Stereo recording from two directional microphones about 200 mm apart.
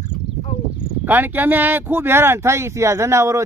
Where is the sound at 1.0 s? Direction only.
10° right (ahead or behind).